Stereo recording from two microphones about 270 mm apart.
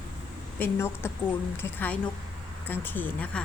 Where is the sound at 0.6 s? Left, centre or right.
Centre.